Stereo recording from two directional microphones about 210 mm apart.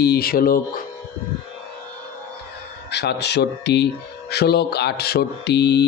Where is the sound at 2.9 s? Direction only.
50° left (ahead or behind).